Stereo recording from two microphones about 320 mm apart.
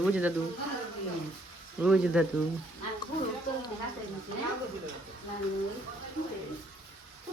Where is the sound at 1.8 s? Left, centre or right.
Centre.